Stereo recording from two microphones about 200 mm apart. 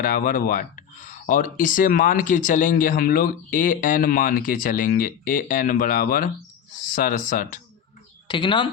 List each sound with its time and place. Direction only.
0.0 s speech: 45° left (ahead or behind)
8.3 s speech: 25° left (ahead or behind)